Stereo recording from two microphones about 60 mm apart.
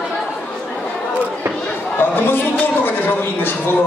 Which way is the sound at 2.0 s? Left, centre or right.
Left.